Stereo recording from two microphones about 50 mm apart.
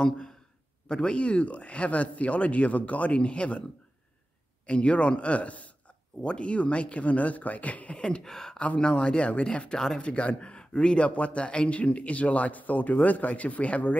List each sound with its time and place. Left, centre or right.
0.0 s a sound: centre
0.8 s a man's voice: centre
4.6 s a man's voice: left
8.5 s a man's voice: centre
9.8 s speech: centre
10.0 s a man's voice: left